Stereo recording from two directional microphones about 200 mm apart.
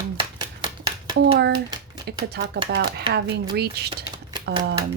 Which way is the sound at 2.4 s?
55° right (ahead or behind).